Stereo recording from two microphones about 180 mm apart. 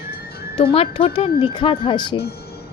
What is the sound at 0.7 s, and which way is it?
Speech, 30° left (ahead or behind).